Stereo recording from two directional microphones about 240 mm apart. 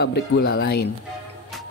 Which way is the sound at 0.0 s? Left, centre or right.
Left.